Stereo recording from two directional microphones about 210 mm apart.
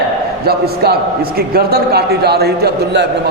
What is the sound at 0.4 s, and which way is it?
A man's voice, 50° right (ahead or behind).